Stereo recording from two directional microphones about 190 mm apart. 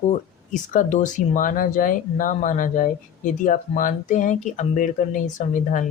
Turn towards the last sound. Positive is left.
turn(degrees=40)  # may be behind; listen again after turning